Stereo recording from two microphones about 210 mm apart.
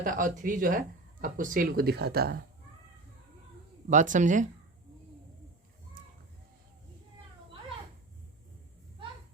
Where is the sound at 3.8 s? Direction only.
35° right (ahead or behind).